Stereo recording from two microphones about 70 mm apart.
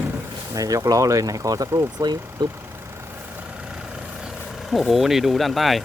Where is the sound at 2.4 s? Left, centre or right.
Right.